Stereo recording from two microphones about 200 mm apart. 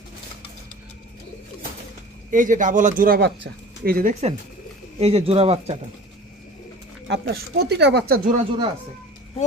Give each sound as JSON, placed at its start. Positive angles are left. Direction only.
{"t": 2.3, "sound": "speech", "side_deg": -40}
{"t": 4.1, "sound": "speech", "side_deg": -30}
{"t": 7.1, "sound": "speech", "side_deg": -55}